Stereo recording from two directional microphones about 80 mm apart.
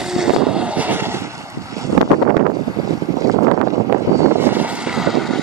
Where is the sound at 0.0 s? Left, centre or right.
Centre; by 1.3 s right.